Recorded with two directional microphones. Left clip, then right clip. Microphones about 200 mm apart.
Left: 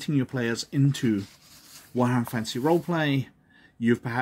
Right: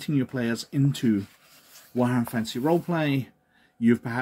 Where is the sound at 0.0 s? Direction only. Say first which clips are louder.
Even; 20° left (ahead or behind).